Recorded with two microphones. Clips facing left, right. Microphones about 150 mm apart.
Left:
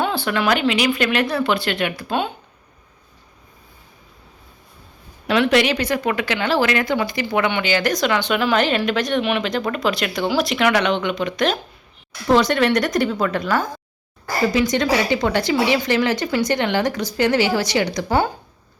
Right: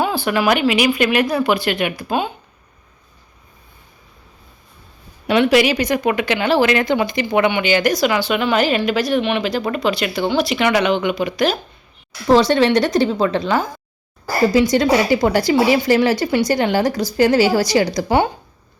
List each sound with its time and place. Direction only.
0.3 s a woman's voice: 15° right (ahead or behind)
2.0 s speech: 5° right (ahead or behind)
5.3 s speech: 5° right (ahead or behind)
12.3 s a woman's voice: 30° right (ahead or behind)